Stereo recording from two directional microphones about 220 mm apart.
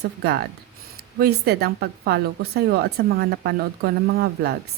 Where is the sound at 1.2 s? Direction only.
45° right (ahead or behind).